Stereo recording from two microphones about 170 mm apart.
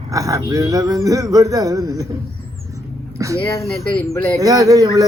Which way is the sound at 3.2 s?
20° right (ahead or behind).